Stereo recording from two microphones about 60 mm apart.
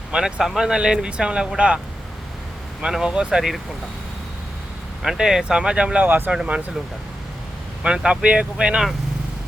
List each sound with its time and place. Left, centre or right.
0.1 s speech: centre
2.8 s speech: centre
5.0 s speech: centre
6.1 s speech: right
6.3 s speech: centre
7.9 s speech: centre